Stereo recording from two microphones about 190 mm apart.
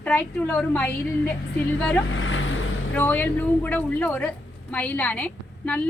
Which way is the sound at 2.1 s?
90° left.